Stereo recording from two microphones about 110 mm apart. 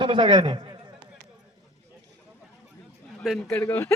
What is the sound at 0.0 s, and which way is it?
Speech, 50° right (ahead or behind).